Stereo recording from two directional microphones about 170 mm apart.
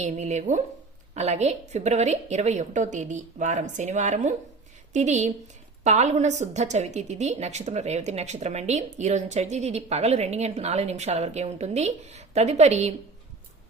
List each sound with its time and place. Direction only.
0.0 s a woman's voice: 40° right (ahead or behind)